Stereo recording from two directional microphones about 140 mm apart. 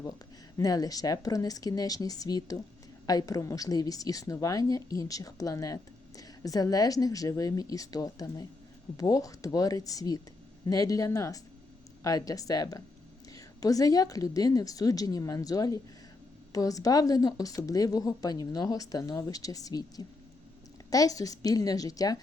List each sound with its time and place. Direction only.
0.5 s a woman's voice: 25° left (ahead or behind)